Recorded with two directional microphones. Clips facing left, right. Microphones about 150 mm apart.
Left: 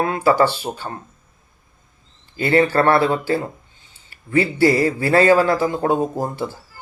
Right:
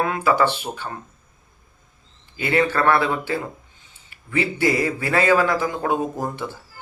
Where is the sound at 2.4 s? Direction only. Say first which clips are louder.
Left 4 dB; 35° left (ahead or behind).